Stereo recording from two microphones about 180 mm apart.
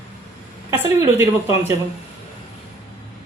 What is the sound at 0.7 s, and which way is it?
Speech, 15° right (ahead or behind).